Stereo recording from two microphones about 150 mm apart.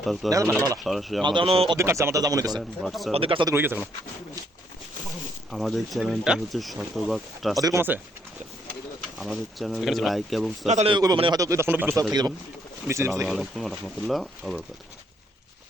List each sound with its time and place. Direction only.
0.0 s speech: centre (ahead or behind)
0.3 s speech: 20° right (ahead or behind)
0.9 s speech: centre (ahead or behind)
1.2 s speech: 35° right (ahead or behind)
1.7 s speech: 20° right (ahead or behind)
2.6 s speech: centre (ahead or behind)
3.1 s speech: 40° right (ahead or behind)
3.4 s speech: 15° right (ahead or behind)
5.5 s speech: centre (ahead or behind)
7.5 s speech: 20° right (ahead or behind)
9.1 s speech: centre (ahead or behind)
10.7 s a man's voice: 50° right (ahead or behind)
10.9 s speech: 25° right (ahead or behind)
13.2 s speech: centre (ahead or behind)